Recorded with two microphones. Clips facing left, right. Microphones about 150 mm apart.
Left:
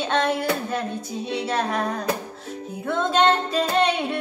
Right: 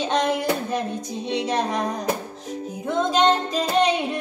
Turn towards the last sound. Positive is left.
turn(degrees=-15)  # may be behind; listen again after turning